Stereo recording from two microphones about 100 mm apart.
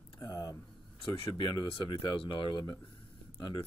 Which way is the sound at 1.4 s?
50° left (ahead or behind).